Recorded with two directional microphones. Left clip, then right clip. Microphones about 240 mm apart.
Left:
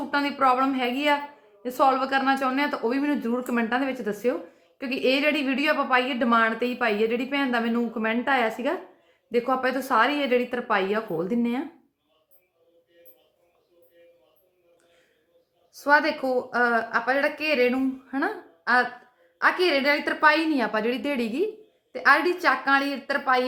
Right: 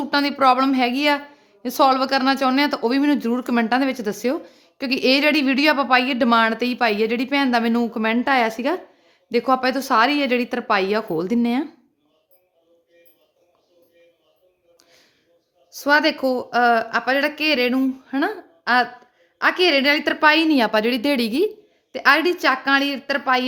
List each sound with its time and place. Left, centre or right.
0.1 s speech: right
15.7 s a woman's voice: right